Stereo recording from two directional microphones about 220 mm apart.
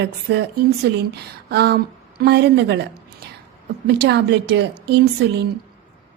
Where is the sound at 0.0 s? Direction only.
50° right (ahead or behind).